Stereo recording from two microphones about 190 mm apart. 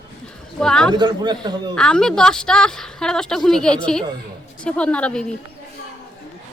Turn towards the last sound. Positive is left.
turn(degrees=5)  # may be behind; listen again after turning